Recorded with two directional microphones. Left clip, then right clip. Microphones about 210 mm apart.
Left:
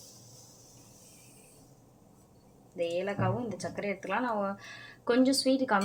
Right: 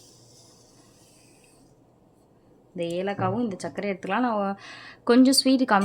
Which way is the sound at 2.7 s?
55° right (ahead or behind).